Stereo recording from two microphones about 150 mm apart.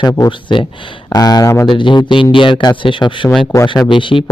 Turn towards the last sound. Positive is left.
turn(degrees=35)  # may be behind; listen again after turning